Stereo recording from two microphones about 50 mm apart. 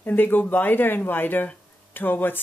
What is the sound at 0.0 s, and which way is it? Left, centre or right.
Speech, left.